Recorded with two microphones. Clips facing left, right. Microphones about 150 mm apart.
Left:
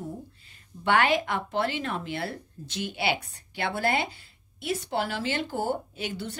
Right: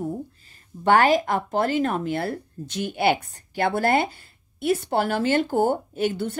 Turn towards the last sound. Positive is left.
turn(degrees=-50)  # may be behind; listen again after turning